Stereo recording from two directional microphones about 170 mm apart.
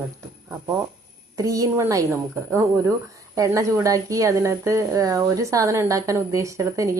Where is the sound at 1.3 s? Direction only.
20° right (ahead or behind).